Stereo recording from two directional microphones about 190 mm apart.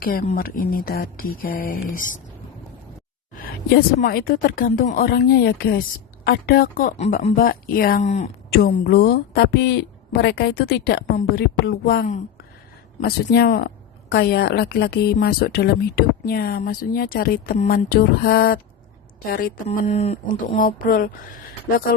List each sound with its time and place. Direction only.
0.0 s speech: 50° left (ahead or behind)
3.7 s speech: 50° left (ahead or behind)
7.4 s speech: 50° left (ahead or behind)
8.5 s a woman's voice: 50° left (ahead or behind)
19.6 s speech: 35° left (ahead or behind)